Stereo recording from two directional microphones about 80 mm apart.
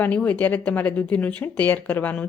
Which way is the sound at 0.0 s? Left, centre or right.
Centre.